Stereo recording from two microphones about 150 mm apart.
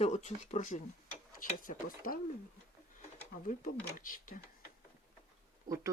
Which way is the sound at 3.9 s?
65° left (ahead or behind).